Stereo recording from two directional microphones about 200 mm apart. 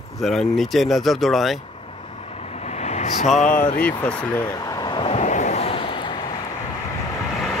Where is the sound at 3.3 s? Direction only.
40° left (ahead or behind).